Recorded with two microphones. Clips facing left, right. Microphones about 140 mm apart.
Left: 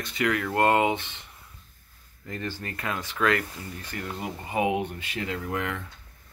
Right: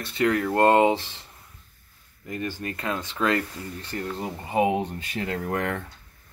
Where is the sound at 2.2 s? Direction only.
15° right (ahead or behind); by 5.8 s 45° right (ahead or behind).